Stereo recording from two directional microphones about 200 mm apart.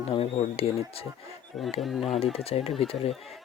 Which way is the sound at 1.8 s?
Centre (ahead or behind).